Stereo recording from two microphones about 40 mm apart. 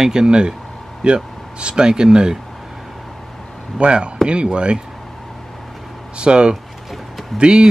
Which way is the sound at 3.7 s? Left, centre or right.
Right.